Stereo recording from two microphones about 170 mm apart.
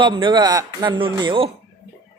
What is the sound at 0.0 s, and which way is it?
Speech, 30° right (ahead or behind).